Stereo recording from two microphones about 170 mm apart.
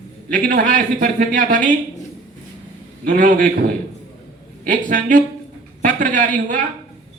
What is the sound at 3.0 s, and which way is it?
Speech, 55° right (ahead or behind).